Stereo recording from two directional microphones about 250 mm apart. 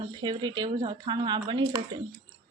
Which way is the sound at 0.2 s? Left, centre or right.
Centre.